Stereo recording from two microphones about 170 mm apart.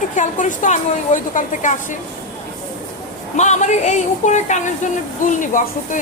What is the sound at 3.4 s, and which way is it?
A woman's voice, 45° left (ahead or behind).